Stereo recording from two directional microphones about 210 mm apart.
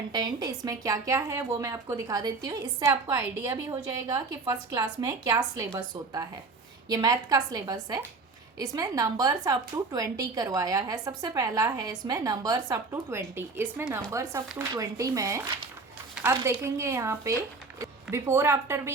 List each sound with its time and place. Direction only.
0.1 s a woman's voice: 20° right (ahead or behind)